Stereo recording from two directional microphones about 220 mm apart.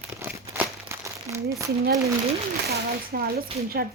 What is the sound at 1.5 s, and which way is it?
Speech, 15° right (ahead or behind).